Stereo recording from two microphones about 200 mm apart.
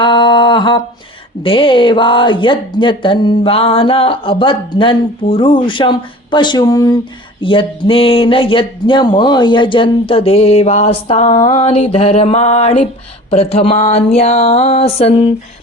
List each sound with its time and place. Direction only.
0.0 s a sound: 25° left (ahead or behind)
1.4 s speech: 25° left (ahead or behind)
11.4 s music: 30° left (ahead or behind)